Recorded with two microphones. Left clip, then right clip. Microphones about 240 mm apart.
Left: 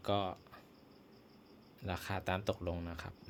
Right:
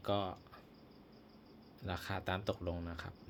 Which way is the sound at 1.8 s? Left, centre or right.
Centre.